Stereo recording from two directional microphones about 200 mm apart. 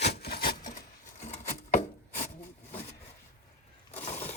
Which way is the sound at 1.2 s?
40° left (ahead or behind).